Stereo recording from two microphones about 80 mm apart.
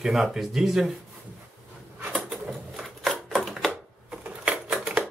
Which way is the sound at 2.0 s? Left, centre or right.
Centre.